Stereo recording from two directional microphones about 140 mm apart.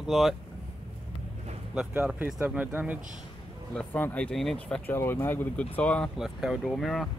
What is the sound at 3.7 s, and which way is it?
Speech, 10° left (ahead or behind).